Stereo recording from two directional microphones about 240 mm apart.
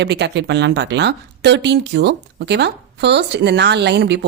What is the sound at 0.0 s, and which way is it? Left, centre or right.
A woman's voice, right.